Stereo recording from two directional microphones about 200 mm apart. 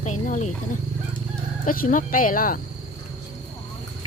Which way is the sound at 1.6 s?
45° left (ahead or behind).